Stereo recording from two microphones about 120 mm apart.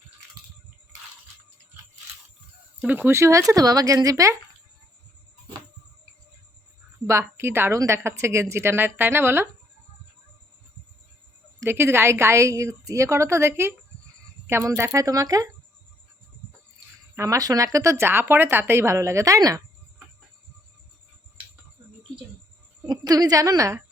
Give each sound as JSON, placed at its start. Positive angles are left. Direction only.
{"t": 2.8, "sound": "a woman's voice", "side_deg": -15}
{"t": 7.1, "sound": "a woman's voice", "side_deg": -20}
{"t": 11.6, "sound": "a woman's voice", "side_deg": -20}
{"t": 17.2, "sound": "a woman's voice", "side_deg": -30}
{"t": 22.9, "sound": "a woman's voice", "side_deg": -35}